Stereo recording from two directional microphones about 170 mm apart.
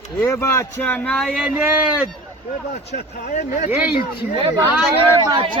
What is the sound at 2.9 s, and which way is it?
Speech, 55° left (ahead or behind).